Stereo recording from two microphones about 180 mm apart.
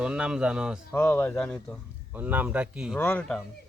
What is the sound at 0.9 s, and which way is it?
Speech, 10° left (ahead or behind).